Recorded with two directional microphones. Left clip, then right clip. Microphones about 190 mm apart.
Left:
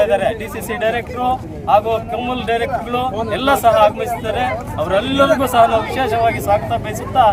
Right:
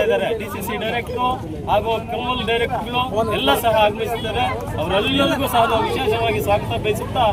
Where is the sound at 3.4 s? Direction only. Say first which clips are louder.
Left 6 dB; 15° left (ahead or behind).